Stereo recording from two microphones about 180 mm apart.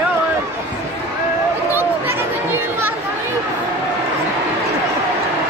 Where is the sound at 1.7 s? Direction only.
10° right (ahead or behind).